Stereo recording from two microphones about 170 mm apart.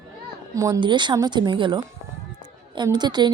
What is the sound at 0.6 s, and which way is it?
A woman's voice, 25° right (ahead or behind).